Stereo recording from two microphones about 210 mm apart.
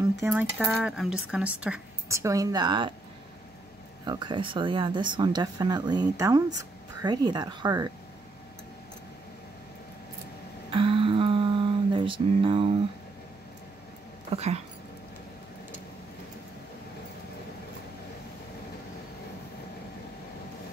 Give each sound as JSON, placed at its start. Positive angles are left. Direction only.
{"t": 0.2, "sound": "speech", "side_deg": -10}
{"t": 4.0, "sound": "speech", "side_deg": -20}
{"t": 10.7, "sound": "mantra", "side_deg": -25}
{"t": 14.3, "sound": "speech", "side_deg": -30}